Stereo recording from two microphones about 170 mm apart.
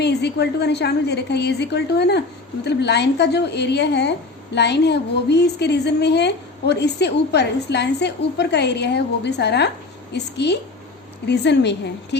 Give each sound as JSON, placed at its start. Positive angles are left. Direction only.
{"t": 0.0, "sound": "a woman's voice", "side_deg": 80}